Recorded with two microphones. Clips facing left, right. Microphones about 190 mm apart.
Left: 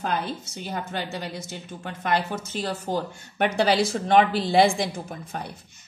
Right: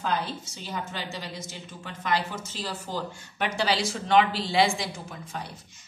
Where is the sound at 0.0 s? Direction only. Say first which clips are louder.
Left 2 dB; 55° left (ahead or behind).